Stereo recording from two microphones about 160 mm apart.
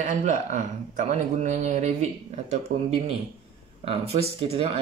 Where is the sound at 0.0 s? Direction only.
50° right (ahead or behind).